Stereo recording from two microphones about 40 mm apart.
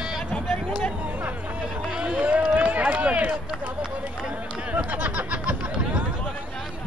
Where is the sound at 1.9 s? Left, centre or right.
Right.